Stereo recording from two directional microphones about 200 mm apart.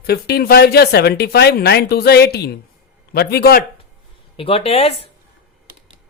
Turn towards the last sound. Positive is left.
turn(degrees=30)  # may be behind; listen again after turning